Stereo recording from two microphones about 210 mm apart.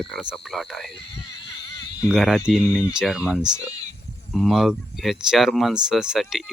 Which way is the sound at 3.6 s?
15° left (ahead or behind).